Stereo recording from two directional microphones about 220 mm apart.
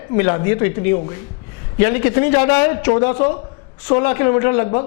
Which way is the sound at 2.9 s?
30° left (ahead or behind).